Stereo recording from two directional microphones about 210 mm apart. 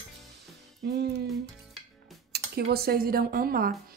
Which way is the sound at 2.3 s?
50° right (ahead or behind).